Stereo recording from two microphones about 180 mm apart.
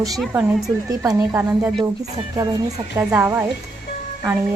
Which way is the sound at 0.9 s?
15° right (ahead or behind).